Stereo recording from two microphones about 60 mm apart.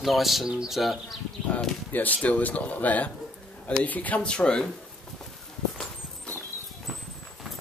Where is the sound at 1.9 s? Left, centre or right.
Left.